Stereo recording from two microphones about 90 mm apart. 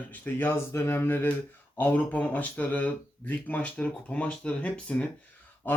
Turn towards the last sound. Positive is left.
turn(degrees=20)  # may be behind; listen again after turning